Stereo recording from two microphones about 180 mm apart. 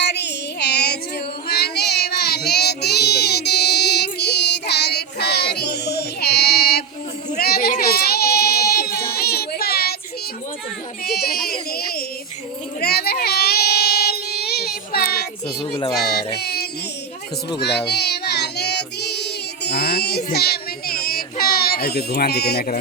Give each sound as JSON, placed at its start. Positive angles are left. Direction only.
{"t": 0.0, "sound": "music", "side_deg": 70}
{"t": 1.5, "sound": "child singing", "side_deg": 65}
{"t": 11.0, "sound": "child singing", "side_deg": 60}
{"t": 11.7, "sound": "a sound", "side_deg": 60}
{"t": 12.8, "sound": "child singing", "side_deg": 60}
{"t": 15.4, "sound": "music", "side_deg": 30}
{"t": 16.4, "sound": "music", "side_deg": 65}
{"t": 17.6, "sound": "child singing", "side_deg": 65}